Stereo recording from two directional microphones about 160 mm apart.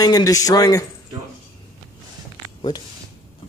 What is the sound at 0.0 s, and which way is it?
Speech, 25° left (ahead or behind).